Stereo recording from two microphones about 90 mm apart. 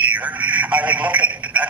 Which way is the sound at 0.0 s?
15° right (ahead or behind).